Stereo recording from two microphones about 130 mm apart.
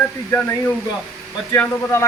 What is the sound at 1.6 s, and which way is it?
Speech, 20° left (ahead or behind).